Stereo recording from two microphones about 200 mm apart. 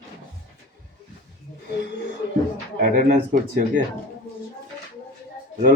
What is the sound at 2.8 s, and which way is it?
Speech, 40° right (ahead or behind).